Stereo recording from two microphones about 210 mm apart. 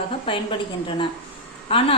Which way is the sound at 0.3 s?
25° left (ahead or behind).